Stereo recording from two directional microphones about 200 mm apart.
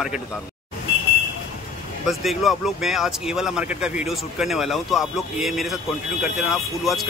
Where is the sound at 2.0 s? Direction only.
Centre (ahead or behind).